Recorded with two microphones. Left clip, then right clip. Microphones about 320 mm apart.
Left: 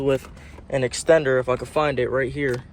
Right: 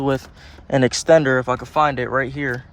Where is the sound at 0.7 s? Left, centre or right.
Right.